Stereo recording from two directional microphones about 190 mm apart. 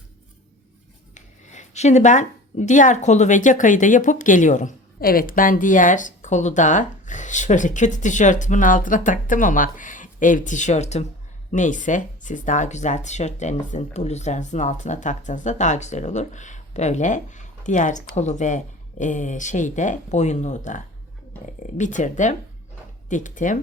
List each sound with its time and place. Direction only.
1.1 s speech: 40° left (ahead or behind)